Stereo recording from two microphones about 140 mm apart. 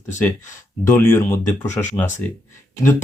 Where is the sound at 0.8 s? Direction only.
15° left (ahead or behind).